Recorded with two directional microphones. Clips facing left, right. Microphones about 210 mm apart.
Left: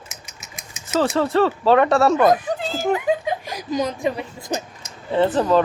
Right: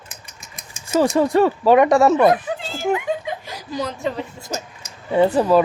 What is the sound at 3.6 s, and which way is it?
A woman's voice, 15° left (ahead or behind).